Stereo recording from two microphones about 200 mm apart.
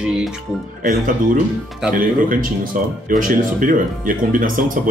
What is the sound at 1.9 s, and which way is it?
Speech, 45° right (ahead or behind).